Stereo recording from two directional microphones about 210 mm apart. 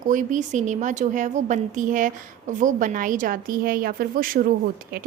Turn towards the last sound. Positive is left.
turn(degrees=-45)  # may be behind; listen again after turning